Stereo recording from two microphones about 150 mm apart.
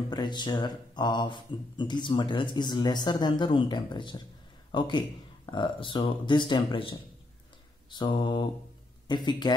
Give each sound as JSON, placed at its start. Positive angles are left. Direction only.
{"t": 0.1, "sound": "speech", "side_deg": 30}